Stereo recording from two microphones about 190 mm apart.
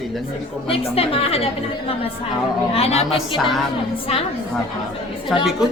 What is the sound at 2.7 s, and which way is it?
Speech, 35° left (ahead or behind).